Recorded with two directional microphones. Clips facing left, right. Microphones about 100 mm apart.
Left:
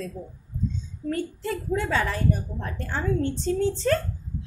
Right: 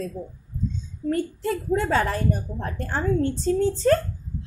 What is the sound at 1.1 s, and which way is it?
A woman's voice, 40° right (ahead or behind).